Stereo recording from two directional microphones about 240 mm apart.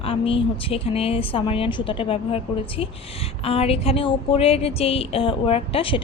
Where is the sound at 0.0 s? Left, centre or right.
Left.